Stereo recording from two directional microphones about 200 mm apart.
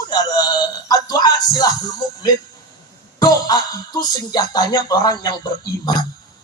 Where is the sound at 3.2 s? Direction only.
20° left (ahead or behind).